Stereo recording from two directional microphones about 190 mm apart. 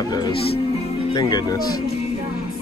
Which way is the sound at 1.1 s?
20° left (ahead or behind).